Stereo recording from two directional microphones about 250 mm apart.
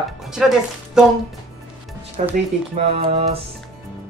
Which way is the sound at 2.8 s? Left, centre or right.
Right.